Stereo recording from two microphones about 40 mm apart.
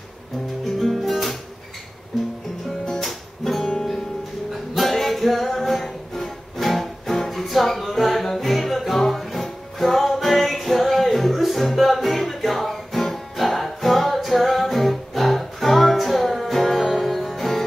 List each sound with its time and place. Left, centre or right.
0.7 s music: centre
3.0 s music: centre